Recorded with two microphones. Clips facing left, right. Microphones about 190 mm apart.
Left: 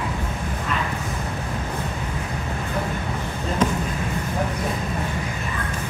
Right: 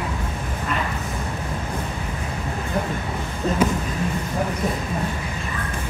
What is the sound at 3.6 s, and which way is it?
Basketball bounce, 10° right (ahead or behind).